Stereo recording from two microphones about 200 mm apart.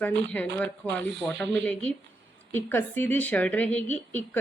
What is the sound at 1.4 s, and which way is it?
Speech, 60° right (ahead or behind).